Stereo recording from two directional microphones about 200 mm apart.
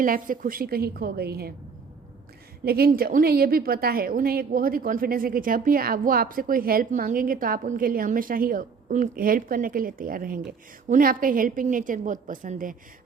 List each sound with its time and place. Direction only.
0.0 s a woman's voice: 45° right (ahead or behind)
2.6 s a woman's voice: 50° right (ahead or behind)